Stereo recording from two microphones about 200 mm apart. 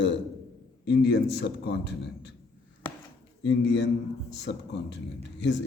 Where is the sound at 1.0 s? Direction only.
55° left (ahead or behind).